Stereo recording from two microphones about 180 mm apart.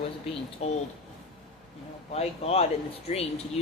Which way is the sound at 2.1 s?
35° left (ahead or behind).